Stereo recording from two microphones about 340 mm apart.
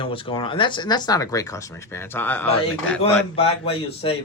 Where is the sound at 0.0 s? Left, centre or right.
Centre.